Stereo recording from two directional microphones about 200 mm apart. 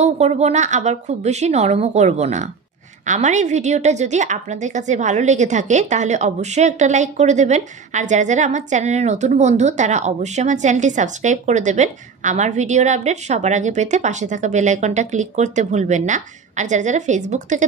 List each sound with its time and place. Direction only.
0.0 s a woman's voice: 35° right (ahead or behind)